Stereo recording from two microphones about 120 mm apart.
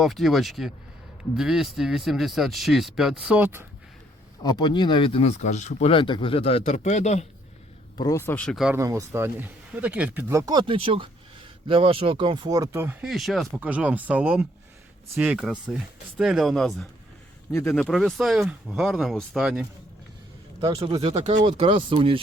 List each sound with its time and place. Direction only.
0.0 s speech: centre (ahead or behind); by 3.7 s 15° right (ahead or behind)
4.4 s speech: 35° left (ahead or behind); by 5.9 s 80° left
5.9 s speech: 45° left (ahead or behind)
6.7 s speech: 85° left; by 7.3 s 70° left (ahead or behind)
8.1 s speech: 20° left (ahead or behind)
8.4 s speech: centre (ahead or behind)
8.7 s speech: 25° right (ahead or behind)
10.5 s speech: 45° right (ahead or behind)
12.5 s speech: 30° right (ahead or behind)
13.0 s speech: centre (ahead or behind)
13.6 s speech: 10° right (ahead or behind)
17.5 s speech: 20° left (ahead or behind)
17.8 s speech: centre (ahead or behind)
21.0 s speech: 55° right (ahead or behind)